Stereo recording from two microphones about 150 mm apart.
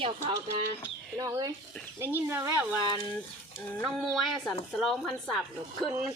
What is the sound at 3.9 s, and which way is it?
A woman's voice, centre (ahead or behind).